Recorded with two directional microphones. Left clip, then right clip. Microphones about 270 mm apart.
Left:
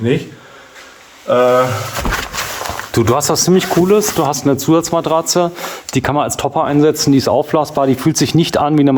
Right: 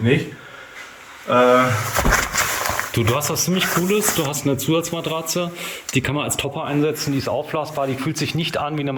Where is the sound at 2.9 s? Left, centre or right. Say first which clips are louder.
Left 12 dB; centre.